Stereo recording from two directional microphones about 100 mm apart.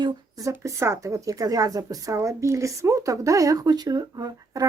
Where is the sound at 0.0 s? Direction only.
35° right (ahead or behind).